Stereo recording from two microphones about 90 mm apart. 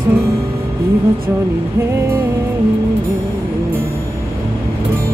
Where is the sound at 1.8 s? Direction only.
30° right (ahead or behind).